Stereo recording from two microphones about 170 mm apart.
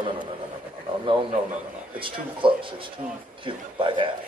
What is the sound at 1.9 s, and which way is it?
A man's voice, 30° right (ahead or behind).